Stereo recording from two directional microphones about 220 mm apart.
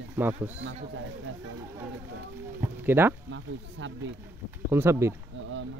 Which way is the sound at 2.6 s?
10° right (ahead or behind).